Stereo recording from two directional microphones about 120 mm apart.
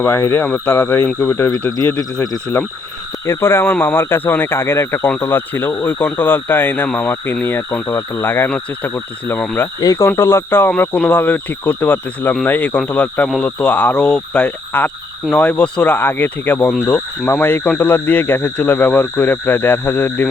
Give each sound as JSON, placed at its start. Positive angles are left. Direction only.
{"t": 0.0, "sound": "speech", "side_deg": 25}
{"t": 0.4, "sound": "speech", "side_deg": 10}
{"t": 0.7, "sound": "speech", "side_deg": 30}
{"t": 2.5, "sound": "speech", "side_deg": 15}
{"t": 9.8, "sound": "speech", "side_deg": 30}